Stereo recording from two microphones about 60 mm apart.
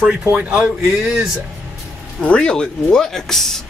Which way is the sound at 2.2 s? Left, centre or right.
Centre.